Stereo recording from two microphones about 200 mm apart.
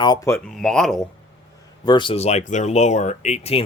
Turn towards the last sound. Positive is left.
turn(degrees=30)  # may be behind; listen again after turning